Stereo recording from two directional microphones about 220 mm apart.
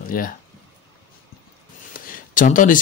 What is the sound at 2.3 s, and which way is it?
Speech, 35° left (ahead or behind).